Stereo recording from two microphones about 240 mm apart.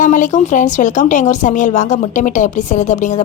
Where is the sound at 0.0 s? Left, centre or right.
Left.